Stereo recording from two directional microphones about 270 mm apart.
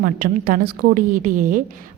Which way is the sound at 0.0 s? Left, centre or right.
Right.